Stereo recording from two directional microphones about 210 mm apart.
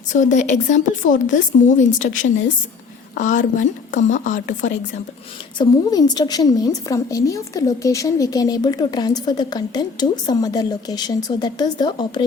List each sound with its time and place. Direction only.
0.1 s a woman's voice: 35° left (ahead or behind)
3.2 s a woman's voice: 35° left (ahead or behind)
5.5 s a woman's voice: 20° left (ahead or behind)